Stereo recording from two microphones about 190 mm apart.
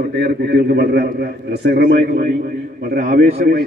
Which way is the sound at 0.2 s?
60° right (ahead or behind).